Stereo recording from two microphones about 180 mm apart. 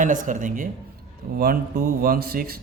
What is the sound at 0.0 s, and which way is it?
A man's voice, 45° right (ahead or behind).